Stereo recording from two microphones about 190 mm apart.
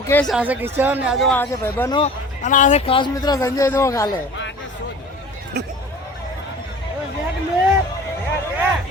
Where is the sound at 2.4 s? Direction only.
40° left (ahead or behind).